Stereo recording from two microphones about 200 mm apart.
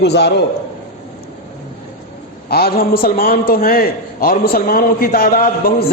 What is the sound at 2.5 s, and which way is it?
A man's voice, 50° left (ahead or behind).